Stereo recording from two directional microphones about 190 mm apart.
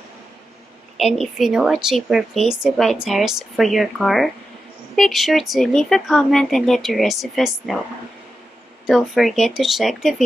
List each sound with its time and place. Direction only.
0.9 s a woman's voice: centre (ahead or behind)
8.8 s a woman's voice: centre (ahead or behind)